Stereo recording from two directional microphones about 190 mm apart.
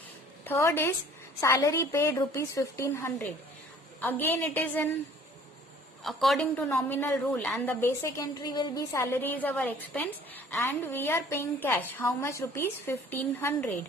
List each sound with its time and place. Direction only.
0.4 s a woman's voice: 15° left (ahead or behind)
6.0 s a woman's voice: centre (ahead or behind)